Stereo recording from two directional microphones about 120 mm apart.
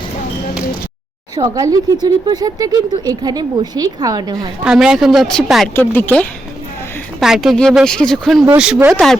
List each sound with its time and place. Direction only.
1.4 s speech: 30° right (ahead or behind)
4.6 s a woman's voice: 5° right (ahead or behind)
5.7 s a woman's voice: 15° left (ahead or behind)
7.2 s a woman's voice: 5° right (ahead or behind)